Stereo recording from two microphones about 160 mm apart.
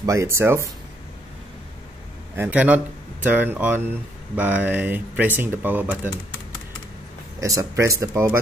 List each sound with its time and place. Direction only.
0.0 s speech: 20° right (ahead or behind)
2.3 s speech: 10° right (ahead or behind)
7.3 s speech: 20° right (ahead or behind)